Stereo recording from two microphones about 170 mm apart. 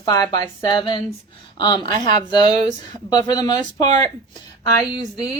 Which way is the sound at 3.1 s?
25° left (ahead or behind).